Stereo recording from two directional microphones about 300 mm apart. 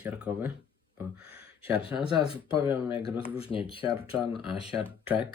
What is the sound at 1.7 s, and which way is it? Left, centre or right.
Speech, centre.